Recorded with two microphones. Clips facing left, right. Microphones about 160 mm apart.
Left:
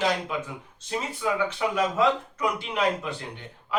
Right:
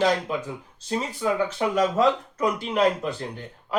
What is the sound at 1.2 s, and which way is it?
Speech, 35° right (ahead or behind).